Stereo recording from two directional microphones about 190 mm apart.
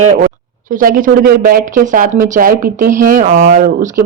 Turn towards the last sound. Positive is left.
turn(degrees=-40)  # may be behind; listen again after turning